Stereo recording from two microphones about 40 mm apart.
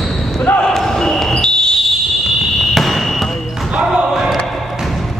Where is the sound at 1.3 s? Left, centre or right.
Centre.